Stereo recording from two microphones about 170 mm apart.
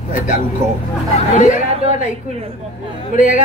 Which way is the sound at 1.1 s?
45° left (ahead or behind).